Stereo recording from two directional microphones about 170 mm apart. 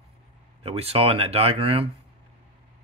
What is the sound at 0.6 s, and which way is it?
Speech, 35° right (ahead or behind).